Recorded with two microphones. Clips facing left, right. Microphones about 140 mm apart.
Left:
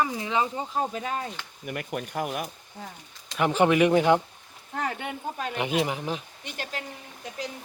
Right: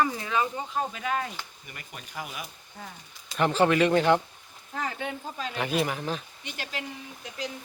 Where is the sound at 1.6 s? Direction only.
60° left (ahead or behind).